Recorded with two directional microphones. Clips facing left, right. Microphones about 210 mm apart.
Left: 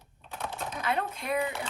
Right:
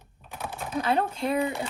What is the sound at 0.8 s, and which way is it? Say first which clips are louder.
Speech: right 6 dB; 30° right (ahead or behind).